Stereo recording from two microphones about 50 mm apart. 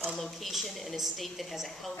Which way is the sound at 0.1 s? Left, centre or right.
Centre.